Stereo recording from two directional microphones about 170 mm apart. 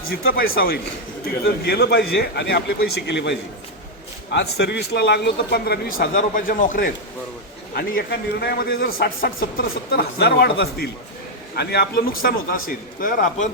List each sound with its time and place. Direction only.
0.1 s a man's voice: 65° left (ahead or behind)
6.1 s a man's voice: 50° left (ahead or behind)